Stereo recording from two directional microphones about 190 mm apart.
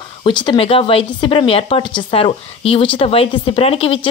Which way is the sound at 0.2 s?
25° left (ahead or behind).